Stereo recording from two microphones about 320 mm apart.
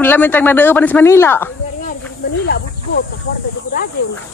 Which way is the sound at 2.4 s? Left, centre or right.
Left.